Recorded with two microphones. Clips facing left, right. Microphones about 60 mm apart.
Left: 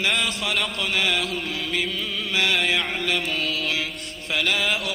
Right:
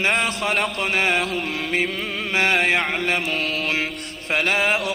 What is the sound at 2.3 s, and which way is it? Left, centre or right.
Chant, right.